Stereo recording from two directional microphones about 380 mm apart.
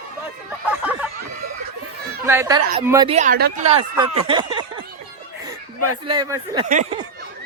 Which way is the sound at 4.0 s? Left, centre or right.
Centre.